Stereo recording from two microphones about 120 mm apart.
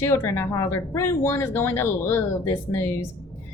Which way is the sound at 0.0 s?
20° left (ahead or behind).